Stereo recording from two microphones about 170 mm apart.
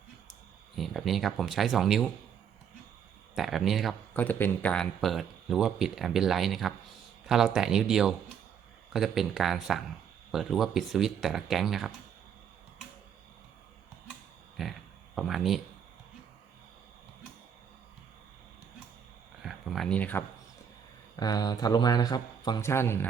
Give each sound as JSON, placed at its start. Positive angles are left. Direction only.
{"t": 0.8, "sound": "speech", "side_deg": 0}
{"t": 3.3, "sound": "speech", "side_deg": 0}
{"t": 4.2, "sound": "speech", "side_deg": 10}
{"t": 14.5, "sound": "a sound", "side_deg": 0}
{"t": 19.4, "sound": "speech", "side_deg": 0}
{"t": 21.2, "sound": "speech", "side_deg": 20}